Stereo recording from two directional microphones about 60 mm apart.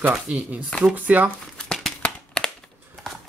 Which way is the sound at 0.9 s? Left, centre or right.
Right.